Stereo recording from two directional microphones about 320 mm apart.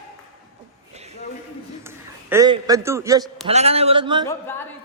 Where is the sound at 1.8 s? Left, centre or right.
Centre.